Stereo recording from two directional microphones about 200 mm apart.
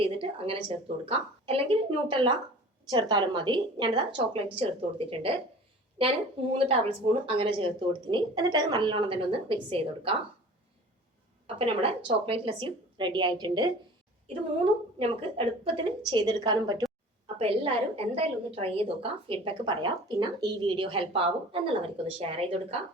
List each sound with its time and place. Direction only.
0.0 s a sound: 30° right (ahead or behind)
1.0 s a woman's voice: 30° right (ahead or behind)
11.5 s a woman's voice: 30° right (ahead or behind)